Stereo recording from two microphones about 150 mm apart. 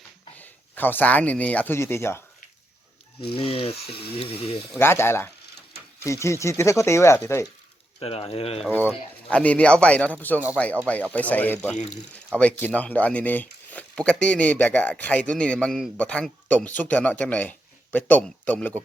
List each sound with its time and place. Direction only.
0.3 s speech: 10° left (ahead or behind)
3.3 s speech: 40° left (ahead or behind)
4.8 s speech: 15° left (ahead or behind)
7.9 s speech: 40° left (ahead or behind)
8.9 s speech: 10° left (ahead or behind)